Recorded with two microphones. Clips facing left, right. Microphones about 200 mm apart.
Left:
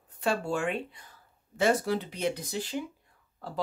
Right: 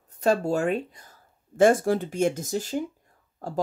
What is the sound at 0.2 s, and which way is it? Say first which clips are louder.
Speech: right 6 dB; 40° right (ahead or behind).